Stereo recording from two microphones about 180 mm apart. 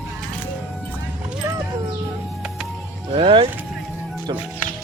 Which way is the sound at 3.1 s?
30° right (ahead or behind).